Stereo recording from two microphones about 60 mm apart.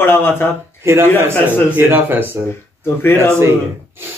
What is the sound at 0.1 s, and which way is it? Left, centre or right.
Speech, left.